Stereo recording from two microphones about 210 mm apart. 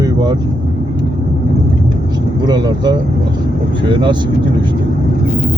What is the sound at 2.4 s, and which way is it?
Speech, 20° right (ahead or behind).